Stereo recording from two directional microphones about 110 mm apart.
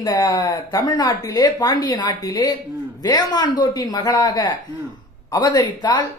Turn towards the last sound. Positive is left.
turn(degrees=40)  # may be behind; listen again after turning